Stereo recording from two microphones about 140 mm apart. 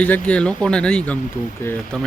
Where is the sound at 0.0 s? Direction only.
10° left (ahead or behind).